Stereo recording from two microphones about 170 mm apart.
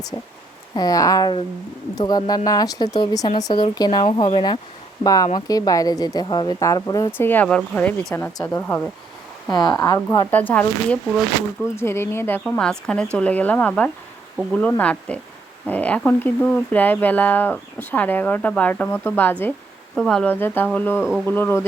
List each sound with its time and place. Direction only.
0.8 s a woman's voice: 20° left (ahead or behind)
5.0 s a woman's voice: 20° left (ahead or behind)
10.3 s speech: 10° left (ahead or behind)